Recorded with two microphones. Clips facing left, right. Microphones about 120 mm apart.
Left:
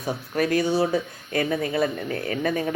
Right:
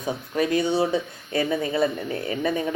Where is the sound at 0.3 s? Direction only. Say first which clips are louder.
Even; 25° right (ahead or behind).